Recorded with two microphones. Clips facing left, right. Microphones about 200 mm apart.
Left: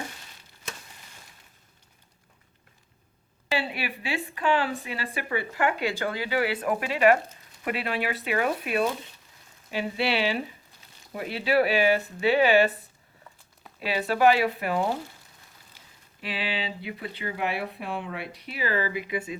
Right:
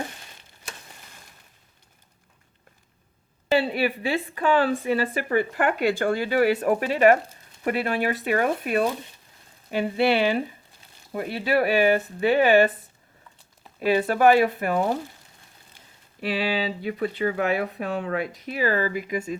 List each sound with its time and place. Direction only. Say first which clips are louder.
3.5 s a woman's voice: right 8 dB; 40° right (ahead or behind)
13.7 s speech: right 5 dB; 50° right (ahead or behind)
16.2 s speech: right 7 dB; 40° right (ahead or behind)